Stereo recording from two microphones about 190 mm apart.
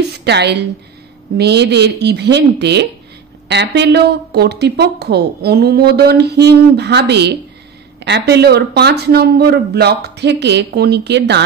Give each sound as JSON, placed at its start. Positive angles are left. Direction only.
{"t": 0.2, "sound": "speech", "side_deg": -60}